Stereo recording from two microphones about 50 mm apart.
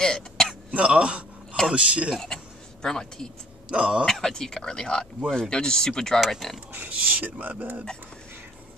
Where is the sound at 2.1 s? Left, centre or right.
Centre.